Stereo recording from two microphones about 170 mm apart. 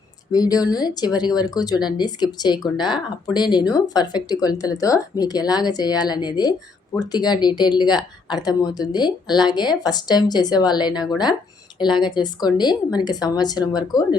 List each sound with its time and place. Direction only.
0.3 s a woman's voice: 20° left (ahead or behind)